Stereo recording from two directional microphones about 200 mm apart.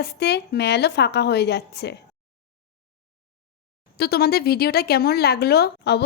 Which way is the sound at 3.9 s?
50° left (ahead or behind).